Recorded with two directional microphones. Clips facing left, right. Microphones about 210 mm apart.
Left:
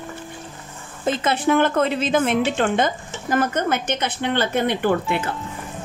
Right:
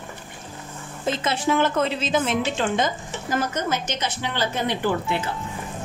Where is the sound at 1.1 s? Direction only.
55° left (ahead or behind).